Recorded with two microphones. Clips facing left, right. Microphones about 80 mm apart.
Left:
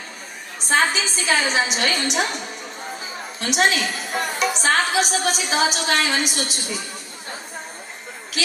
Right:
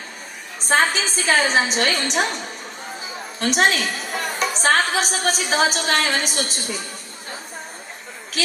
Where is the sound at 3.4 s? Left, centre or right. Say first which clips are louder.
Right 1 dB; right.